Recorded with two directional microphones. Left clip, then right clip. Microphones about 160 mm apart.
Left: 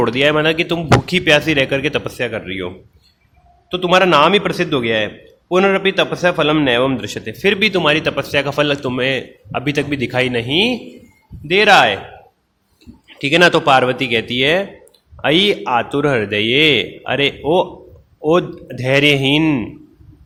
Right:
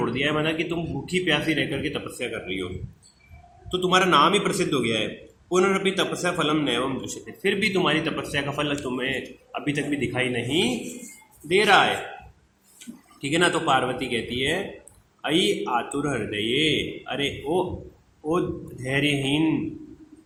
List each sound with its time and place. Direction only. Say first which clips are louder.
0.0 s speech: left 11 dB; 55° left (ahead or behind)
3.7 s a man's voice: left 8 dB; 40° left (ahead or behind)
13.2 s a man's voice: left 10 dB; 50° left (ahead or behind)
18.9 s speech: left 11 dB; 55° left (ahead or behind)